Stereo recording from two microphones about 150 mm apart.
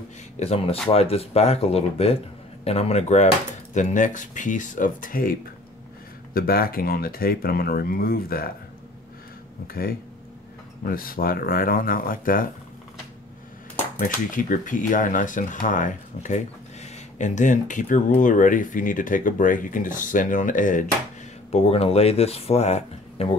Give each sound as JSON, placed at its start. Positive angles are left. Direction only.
{"t": 0.4, "sound": "speech", "side_deg": 40}
{"t": 6.3, "sound": "speech", "side_deg": 80}
{"t": 10.9, "sound": "speech", "side_deg": 70}
{"t": 13.9, "sound": "speech", "side_deg": 60}
{"t": 21.5, "sound": "speech", "side_deg": 40}